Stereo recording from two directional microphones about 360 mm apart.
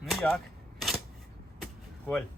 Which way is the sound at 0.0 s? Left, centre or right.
Centre.